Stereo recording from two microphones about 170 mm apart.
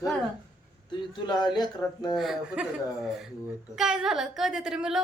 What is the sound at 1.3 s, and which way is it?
Speech, 25° left (ahead or behind).